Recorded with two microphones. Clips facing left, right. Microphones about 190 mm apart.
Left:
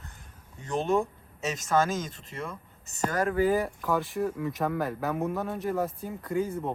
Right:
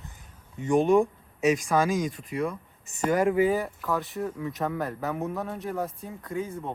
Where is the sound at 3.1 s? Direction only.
20° right (ahead or behind).